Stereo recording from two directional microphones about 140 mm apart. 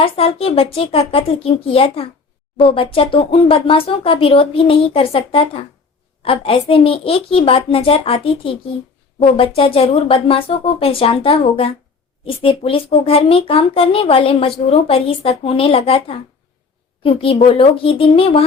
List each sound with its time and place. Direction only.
0.0 s speech: 45° left (ahead or behind)